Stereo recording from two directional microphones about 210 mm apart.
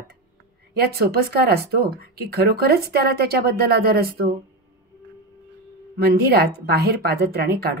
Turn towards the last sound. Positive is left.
turn(degrees=-50)  # may be behind; listen again after turning